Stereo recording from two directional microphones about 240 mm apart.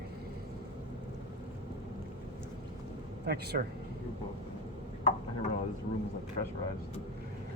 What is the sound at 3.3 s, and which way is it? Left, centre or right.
Speech, right.